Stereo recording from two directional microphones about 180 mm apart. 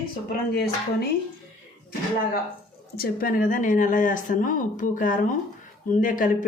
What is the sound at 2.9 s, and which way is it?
Speech, 55° left (ahead or behind).